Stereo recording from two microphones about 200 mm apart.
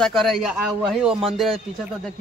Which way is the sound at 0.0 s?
Centre (ahead or behind).